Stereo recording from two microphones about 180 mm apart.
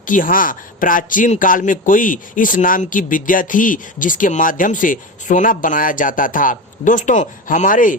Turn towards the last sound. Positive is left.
turn(degrees=50)  # may be behind; listen again after turning